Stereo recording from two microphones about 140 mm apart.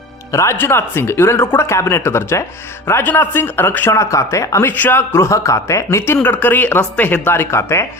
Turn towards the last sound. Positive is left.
turn(degrees=20)  # may be behind; listen again after turning